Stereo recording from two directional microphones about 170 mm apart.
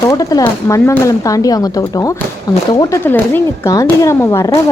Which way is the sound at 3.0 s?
10° left (ahead or behind).